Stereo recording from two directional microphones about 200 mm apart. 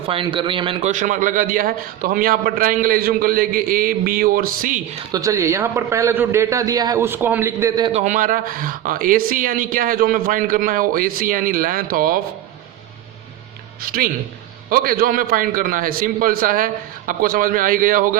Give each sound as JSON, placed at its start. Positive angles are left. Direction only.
{"t": 0.1, "sound": "a man's voice", "side_deg": -25}
{"t": 5.1, "sound": "a man's voice", "side_deg": -15}
{"t": 7.9, "sound": "a man's voice", "side_deg": -35}
{"t": 13.8, "sound": "a man's voice", "side_deg": -45}